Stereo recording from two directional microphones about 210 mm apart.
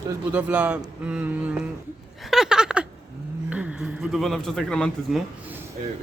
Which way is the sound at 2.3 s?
Centre (ahead or behind).